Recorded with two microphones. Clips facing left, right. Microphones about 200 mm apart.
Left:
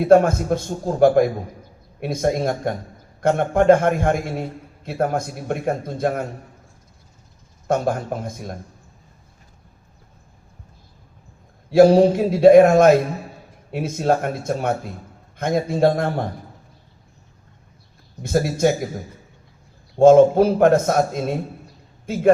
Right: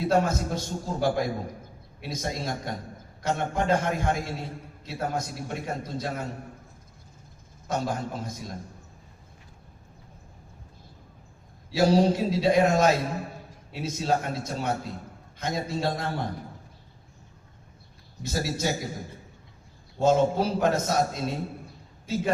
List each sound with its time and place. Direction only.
0.0 s a man's voice: 55° left (ahead or behind)
7.7 s a man's voice: 55° left (ahead or behind)
11.7 s a man's voice: 55° left (ahead or behind)
18.2 s a man's voice: 55° left (ahead or behind)
20.0 s a man's voice: 55° left (ahead or behind)